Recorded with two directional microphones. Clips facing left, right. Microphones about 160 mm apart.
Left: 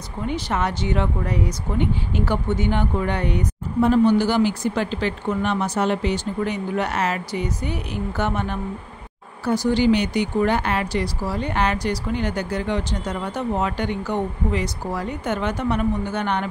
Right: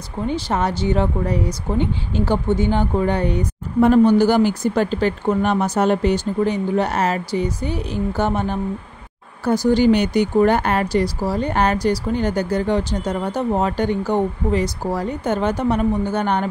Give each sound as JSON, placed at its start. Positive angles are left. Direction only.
{"t": 0.3, "sound": "speech", "side_deg": -35}
{"t": 3.8, "sound": "speech", "side_deg": -50}
{"t": 9.4, "sound": "speech", "side_deg": -45}